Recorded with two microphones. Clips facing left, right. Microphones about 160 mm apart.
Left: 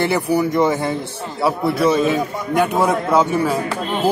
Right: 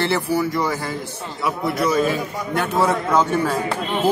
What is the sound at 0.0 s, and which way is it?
Speech, 15° left (ahead or behind).